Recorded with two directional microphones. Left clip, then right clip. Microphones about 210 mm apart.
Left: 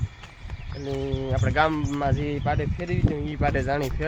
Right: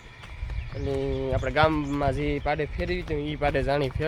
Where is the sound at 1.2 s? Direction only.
10° right (ahead or behind).